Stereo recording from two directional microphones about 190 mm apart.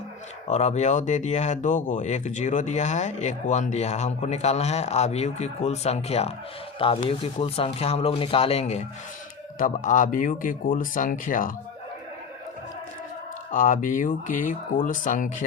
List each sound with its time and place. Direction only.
0.4 s speech: 35° left (ahead or behind)
13.5 s speech: 45° left (ahead or behind)